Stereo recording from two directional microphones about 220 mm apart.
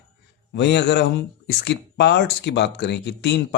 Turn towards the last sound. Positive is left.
turn(degrees=50)  # may be behind; listen again after turning